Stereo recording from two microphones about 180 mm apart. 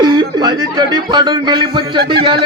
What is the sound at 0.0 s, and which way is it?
A man's voice, 25° right (ahead or behind).